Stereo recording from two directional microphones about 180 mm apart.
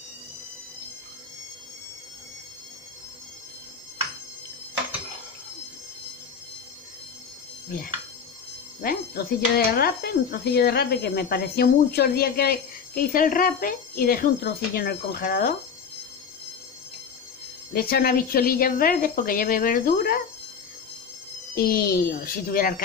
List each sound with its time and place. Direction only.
8.8 s speech: 55° left (ahead or behind)
17.7 s a woman's voice: 55° left (ahead or behind)
21.5 s speech: 55° left (ahead or behind)